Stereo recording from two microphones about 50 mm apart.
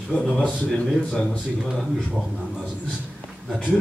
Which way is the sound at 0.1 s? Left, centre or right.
Left.